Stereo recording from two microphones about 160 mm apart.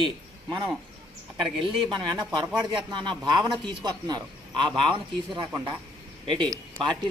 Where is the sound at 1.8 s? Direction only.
25° right (ahead or behind).